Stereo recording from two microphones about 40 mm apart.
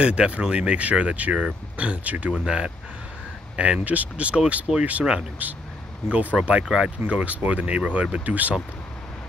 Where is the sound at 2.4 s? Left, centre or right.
Right.